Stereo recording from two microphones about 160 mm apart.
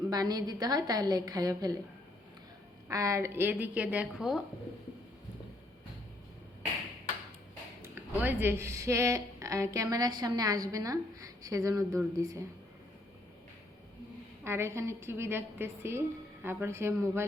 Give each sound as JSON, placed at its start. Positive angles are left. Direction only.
{"t": 0.1, "sound": "a woman's voice", "side_deg": -25}
{"t": 2.9, "sound": "a woman's voice", "side_deg": -20}
{"t": 8.1, "sound": "a woman's voice", "side_deg": -10}
{"t": 14.4, "sound": "a woman's voice", "side_deg": -15}